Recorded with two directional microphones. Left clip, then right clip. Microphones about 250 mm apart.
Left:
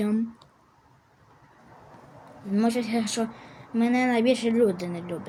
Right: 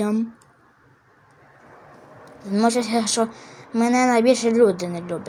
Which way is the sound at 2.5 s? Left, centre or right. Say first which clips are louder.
Right 6 dB; centre.